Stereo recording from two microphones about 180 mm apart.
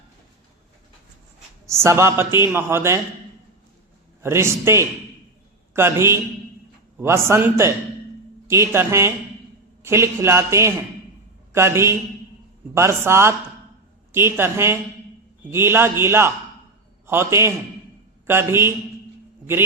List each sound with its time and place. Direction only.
1.6 s a man's voice: 15° right (ahead or behind)
4.2 s a man's voice: 15° right (ahead or behind)